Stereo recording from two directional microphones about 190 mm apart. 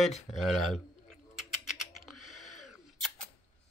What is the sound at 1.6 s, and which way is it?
Typing, centre (ahead or behind).